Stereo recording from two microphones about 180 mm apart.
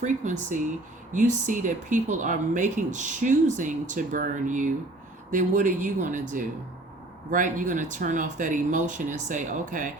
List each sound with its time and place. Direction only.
0.0 s speech: 45° right (ahead or behind)